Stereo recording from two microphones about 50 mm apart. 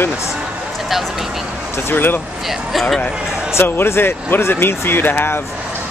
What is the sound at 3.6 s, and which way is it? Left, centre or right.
Speech, left.